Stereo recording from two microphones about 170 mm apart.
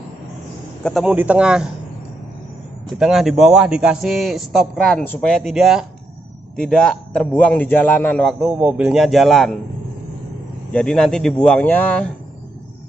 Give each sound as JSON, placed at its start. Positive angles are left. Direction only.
{"t": 0.8, "sound": "a man's voice", "side_deg": 0}
{"t": 3.0, "sound": "a man's voice", "side_deg": 0}
{"t": 8.4, "sound": "a man's voice", "side_deg": -10}
{"t": 10.7, "sound": "a man's voice", "side_deg": 5}